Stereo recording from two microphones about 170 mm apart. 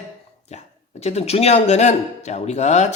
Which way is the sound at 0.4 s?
40° left (ahead or behind).